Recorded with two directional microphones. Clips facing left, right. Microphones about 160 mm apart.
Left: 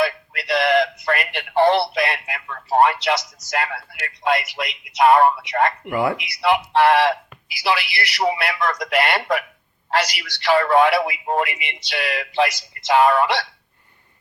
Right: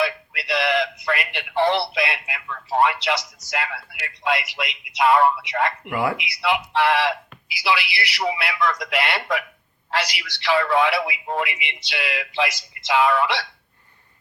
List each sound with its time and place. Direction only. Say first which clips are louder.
0.0 s speech: left 3 dB; 45° left (ahead or behind)
5.9 s speech: left 2 dB; 20° left (ahead or behind)
6.1 s speech: left 4 dB; 45° left (ahead or behind)